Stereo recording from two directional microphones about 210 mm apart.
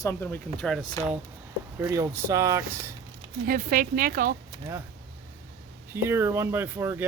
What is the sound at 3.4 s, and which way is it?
Speech, 45° right (ahead or behind).